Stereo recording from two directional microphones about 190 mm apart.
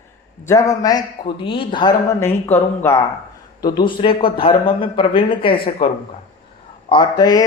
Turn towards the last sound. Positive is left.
turn(degrees=20)  # may be behind; listen again after turning